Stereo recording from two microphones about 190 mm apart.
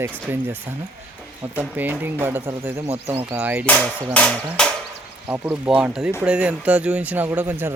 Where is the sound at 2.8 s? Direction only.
35° right (ahead or behind).